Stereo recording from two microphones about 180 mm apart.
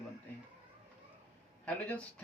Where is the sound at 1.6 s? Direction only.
5° left (ahead or behind).